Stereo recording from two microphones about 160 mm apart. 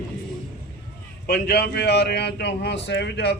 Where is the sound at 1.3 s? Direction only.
85° left.